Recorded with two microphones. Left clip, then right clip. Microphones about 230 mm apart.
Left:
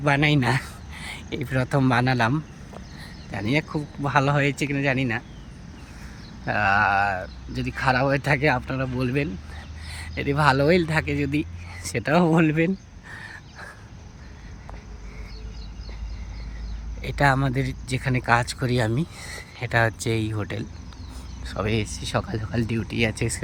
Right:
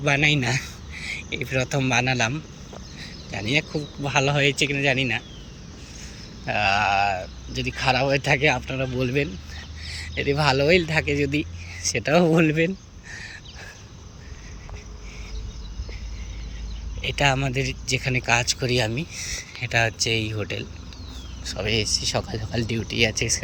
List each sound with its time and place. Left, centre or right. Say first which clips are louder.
0.0 s speech: right 1 dB; centre
6.4 s speech: left 1 dB; centre
17.0 s speech: even; left